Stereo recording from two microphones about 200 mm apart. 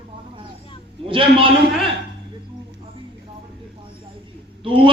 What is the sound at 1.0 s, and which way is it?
Speech, 25° right (ahead or behind).